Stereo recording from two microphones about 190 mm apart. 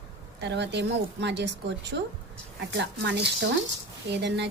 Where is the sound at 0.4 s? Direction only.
65° right (ahead or behind).